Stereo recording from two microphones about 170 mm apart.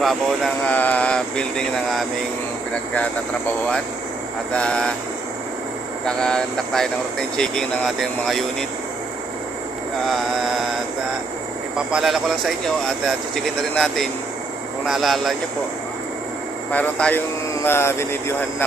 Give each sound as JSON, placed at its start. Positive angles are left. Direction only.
{"t": 0.0, "sound": "speech", "side_deg": 0}
{"t": 6.1, "sound": "speech", "side_deg": 5}
{"t": 11.9, "sound": "speech", "side_deg": 0}
{"t": 16.7, "sound": "speech", "side_deg": 10}